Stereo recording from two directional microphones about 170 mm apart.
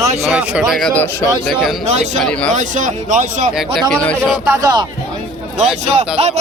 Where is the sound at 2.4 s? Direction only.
45° right (ahead or behind).